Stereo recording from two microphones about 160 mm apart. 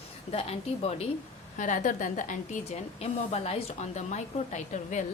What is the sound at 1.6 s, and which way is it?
A woman's voice, 55° left (ahead or behind).